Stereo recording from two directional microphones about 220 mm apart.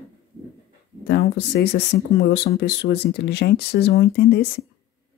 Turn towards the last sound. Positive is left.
turn(degrees=45)  # may be behind; listen again after turning